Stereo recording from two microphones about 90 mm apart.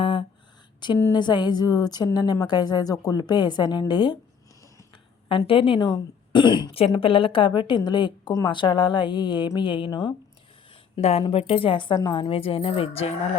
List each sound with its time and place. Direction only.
0.0 s a sound: 70° left (ahead or behind)
1.1 s a woman's voice: 55° left (ahead or behind)
5.3 s speech: 75° left (ahead or behind); by 9.5 s 55° left (ahead or behind)
9.6 s speech: 65° left (ahead or behind)
10.9 s a woman's voice: 80° left
11.9 s speech: 55° left (ahead or behind); by 13.1 s 90° left